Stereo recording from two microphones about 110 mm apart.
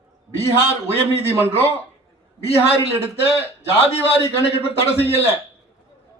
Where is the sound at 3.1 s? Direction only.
60° left (ahead or behind).